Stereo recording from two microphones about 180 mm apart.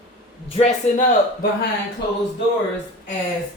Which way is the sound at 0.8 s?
40° left (ahead or behind).